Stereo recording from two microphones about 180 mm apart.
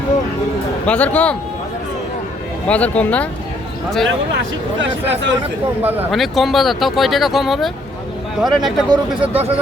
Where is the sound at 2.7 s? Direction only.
10° left (ahead or behind).